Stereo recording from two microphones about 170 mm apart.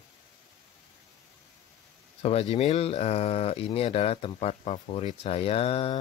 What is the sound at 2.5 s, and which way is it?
Speech, 40° left (ahead or behind).